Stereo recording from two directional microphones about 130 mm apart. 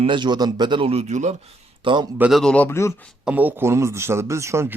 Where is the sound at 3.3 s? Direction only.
15° right (ahead or behind).